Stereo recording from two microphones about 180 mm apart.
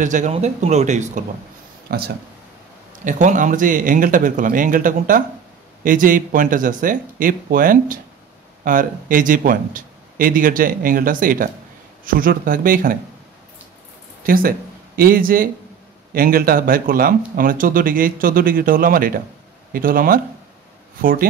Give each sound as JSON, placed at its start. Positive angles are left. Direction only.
{"t": 0.0, "sound": "speech", "side_deg": -45}
{"t": 1.9, "sound": "speech", "side_deg": -60}
{"t": 3.1, "sound": "speech", "side_deg": -45}
{"t": 14.2, "sound": "speech", "side_deg": -50}